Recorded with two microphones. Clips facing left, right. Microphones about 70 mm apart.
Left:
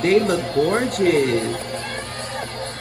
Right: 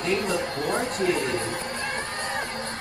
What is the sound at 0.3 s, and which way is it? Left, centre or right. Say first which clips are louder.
Speech: left 7 dB; left.